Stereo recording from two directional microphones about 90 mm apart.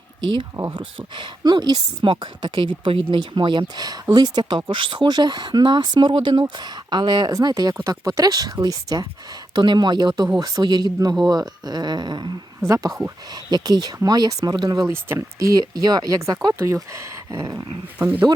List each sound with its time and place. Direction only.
0.7 s a woman's voice: 65° right (ahead or behind)
12.6 s speech: 40° right (ahead or behind)
13.3 s speech: 50° right (ahead or behind)
14.8 s speech: 30° right (ahead or behind)
15.5 s speech: 50° right (ahead or behind)
16.6 s speech: 35° right (ahead or behind)
18.0 s speech: 15° right (ahead or behind)